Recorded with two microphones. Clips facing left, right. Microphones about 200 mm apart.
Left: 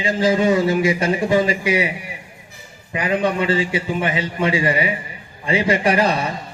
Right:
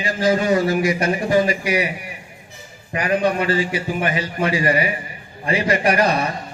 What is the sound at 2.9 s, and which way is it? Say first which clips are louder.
A man's voice: right 1 dB; 25° left (ahead or behind).